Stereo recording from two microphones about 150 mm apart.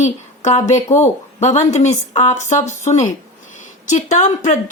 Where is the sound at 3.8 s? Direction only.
55° left (ahead or behind).